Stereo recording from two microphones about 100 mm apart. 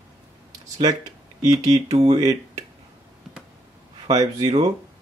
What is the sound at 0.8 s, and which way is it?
Speech, 40° right (ahead or behind).